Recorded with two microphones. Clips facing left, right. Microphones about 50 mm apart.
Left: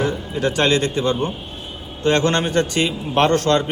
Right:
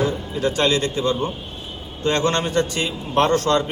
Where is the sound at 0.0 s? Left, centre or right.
Left.